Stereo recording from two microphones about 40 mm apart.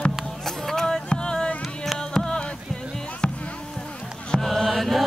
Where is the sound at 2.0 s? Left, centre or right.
Left.